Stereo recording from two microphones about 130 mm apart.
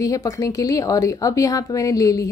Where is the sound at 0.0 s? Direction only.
25° left (ahead or behind).